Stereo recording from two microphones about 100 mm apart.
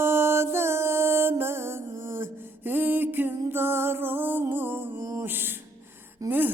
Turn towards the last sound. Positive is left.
turn(degrees=-20)  # may be behind; listen again after turning